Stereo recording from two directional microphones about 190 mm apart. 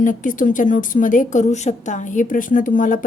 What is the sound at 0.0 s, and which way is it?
A woman's voice, 45° left (ahead or behind).